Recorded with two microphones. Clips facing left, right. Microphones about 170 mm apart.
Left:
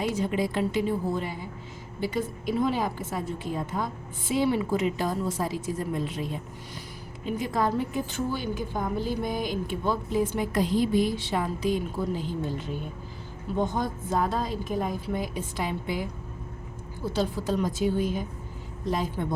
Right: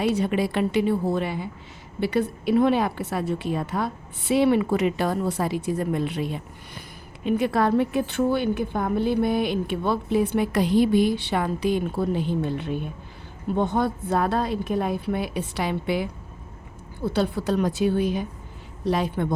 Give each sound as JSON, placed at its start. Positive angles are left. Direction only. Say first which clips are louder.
{"t": 0.0, "sound": "a woman's voice", "louder": "right 4 dB", "side_deg": -65}
{"t": 17.1, "sound": "a woman's voice", "louder": "right 4 dB", "side_deg": -65}